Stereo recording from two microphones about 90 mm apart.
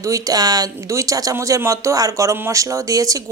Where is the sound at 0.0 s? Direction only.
40° right (ahead or behind).